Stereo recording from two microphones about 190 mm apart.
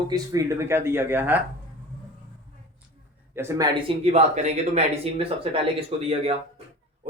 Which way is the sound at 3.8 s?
30° right (ahead or behind).